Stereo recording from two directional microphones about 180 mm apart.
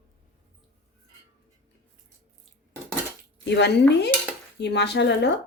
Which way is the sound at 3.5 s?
70° left (ahead or behind).